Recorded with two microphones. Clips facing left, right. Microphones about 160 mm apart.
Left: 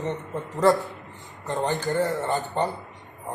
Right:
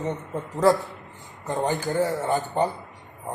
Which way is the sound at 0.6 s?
Centre (ahead or behind).